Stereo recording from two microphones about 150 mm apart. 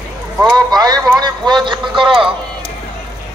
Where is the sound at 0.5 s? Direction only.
25° right (ahead or behind).